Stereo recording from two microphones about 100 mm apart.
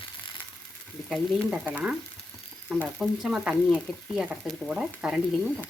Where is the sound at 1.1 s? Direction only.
10° right (ahead or behind).